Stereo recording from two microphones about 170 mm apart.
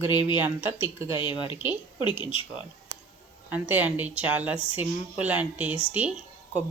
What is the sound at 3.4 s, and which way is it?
A woman's voice, 10° right (ahead or behind).